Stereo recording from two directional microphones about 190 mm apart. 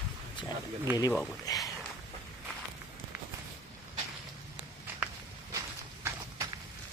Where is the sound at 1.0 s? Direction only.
20° left (ahead or behind).